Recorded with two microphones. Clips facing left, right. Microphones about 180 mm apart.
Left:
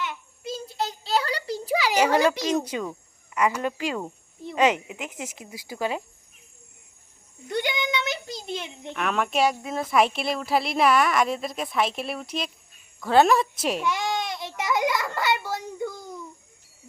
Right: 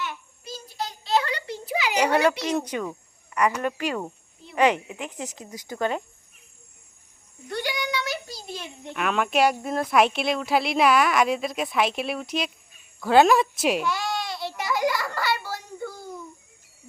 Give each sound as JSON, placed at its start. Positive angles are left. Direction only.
{"t": 0.0, "sound": "child singing", "side_deg": 20}
{"t": 2.6, "sound": "a woman's voice", "side_deg": 10}
{"t": 5.5, "sound": "a woman's voice", "side_deg": 5}
{"t": 7.5, "sound": "a sound", "side_deg": 20}
{"t": 8.9, "sound": "a woman's voice", "side_deg": 0}
{"t": 13.8, "sound": "child singing", "side_deg": 20}